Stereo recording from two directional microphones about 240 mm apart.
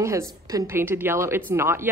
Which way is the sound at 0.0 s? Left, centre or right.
Centre.